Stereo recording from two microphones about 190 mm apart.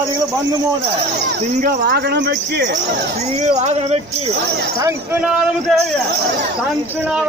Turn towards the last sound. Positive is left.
turn(degrees=-5)  # may be behind; listen again after turning